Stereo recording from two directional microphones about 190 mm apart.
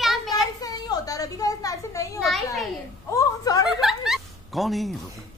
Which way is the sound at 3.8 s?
Centre (ahead or behind).